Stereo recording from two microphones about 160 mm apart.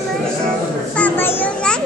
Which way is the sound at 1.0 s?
10° left (ahead or behind).